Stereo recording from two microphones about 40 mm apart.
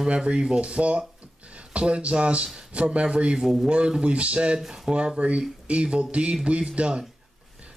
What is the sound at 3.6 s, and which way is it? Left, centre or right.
A man's voice, right.